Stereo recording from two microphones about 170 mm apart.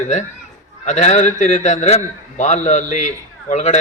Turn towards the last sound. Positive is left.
turn(degrees=45)  # may be behind; listen again after turning